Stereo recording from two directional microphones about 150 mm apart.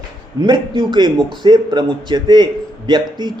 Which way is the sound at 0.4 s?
30° right (ahead or behind).